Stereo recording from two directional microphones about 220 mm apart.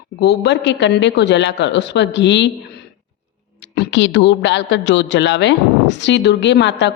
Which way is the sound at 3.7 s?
55° left (ahead or behind).